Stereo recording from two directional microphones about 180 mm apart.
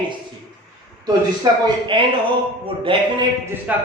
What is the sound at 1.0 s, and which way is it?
A man's voice, 25° right (ahead or behind).